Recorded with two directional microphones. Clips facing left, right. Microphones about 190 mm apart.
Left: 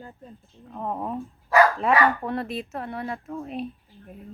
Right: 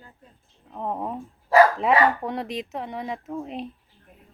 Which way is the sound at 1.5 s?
30° right (ahead or behind).